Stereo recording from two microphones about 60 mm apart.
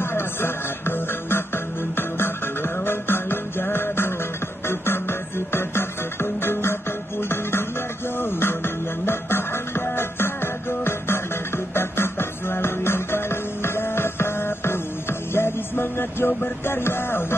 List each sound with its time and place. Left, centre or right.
0.0 s music: left